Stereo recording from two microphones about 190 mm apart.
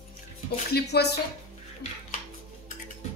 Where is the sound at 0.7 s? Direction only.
60° left (ahead or behind).